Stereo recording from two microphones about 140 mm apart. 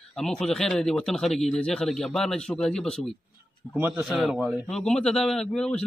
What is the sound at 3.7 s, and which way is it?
A man's voice, 15° right (ahead or behind).